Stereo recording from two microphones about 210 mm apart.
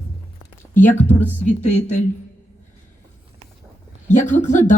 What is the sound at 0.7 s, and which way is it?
Speech, 35° left (ahead or behind).